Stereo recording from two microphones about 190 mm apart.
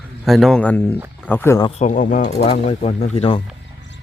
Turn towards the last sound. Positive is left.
turn(degrees=30)  # may be behind; listen again after turning